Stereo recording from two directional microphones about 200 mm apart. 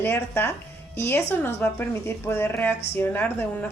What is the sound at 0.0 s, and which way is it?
A woman's voice, 10° left (ahead or behind).